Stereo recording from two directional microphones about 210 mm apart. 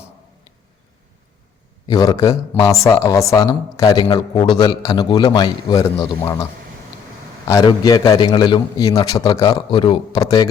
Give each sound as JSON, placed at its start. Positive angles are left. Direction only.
{"t": 1.9, "sound": "speech", "side_deg": 15}
{"t": 7.4, "sound": "a man's voice", "side_deg": 20}